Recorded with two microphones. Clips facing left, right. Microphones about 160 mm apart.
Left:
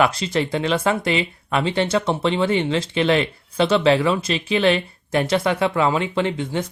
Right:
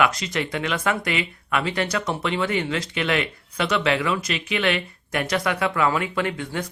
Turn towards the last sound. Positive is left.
turn(degrees=25)  # may be behind; listen again after turning